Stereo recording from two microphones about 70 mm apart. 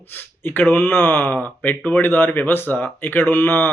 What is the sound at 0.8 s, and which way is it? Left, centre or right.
Speech, centre.